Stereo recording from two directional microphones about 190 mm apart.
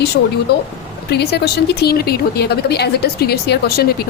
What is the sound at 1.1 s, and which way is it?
A woman's voice, 60° left (ahead or behind).